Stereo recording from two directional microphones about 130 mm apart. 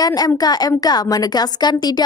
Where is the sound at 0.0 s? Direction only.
30° left (ahead or behind).